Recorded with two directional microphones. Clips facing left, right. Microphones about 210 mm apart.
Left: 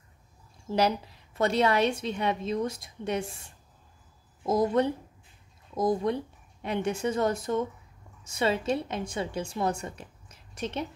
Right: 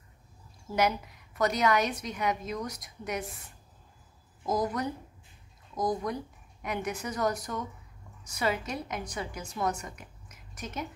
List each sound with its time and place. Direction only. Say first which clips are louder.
0.7 s a woman's voice: left 2 dB; 30° left (ahead or behind)